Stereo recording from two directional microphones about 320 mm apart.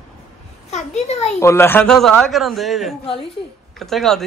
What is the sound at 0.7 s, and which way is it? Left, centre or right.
Speech, left.